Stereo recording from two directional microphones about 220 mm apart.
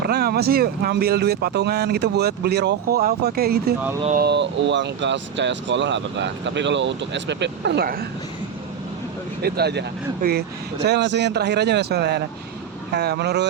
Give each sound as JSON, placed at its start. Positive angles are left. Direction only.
{"t": 0.0, "sound": "speech", "side_deg": -45}
{"t": 9.4, "sound": "speech", "side_deg": -45}